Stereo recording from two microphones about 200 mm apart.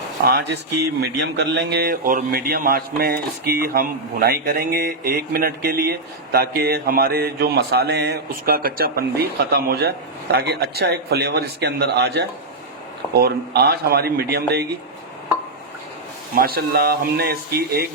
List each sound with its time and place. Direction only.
0.3 s a man's voice: 50° right (ahead or behind)
16.3 s a man's voice: 50° right (ahead or behind)